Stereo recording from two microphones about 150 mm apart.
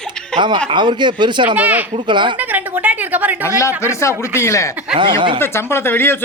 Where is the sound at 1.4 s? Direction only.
10° right (ahead or behind).